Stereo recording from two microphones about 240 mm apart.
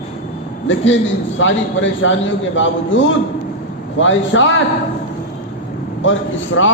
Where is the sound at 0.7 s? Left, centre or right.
Left.